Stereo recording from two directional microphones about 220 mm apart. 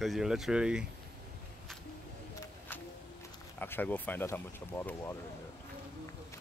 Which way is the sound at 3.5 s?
10° left (ahead or behind).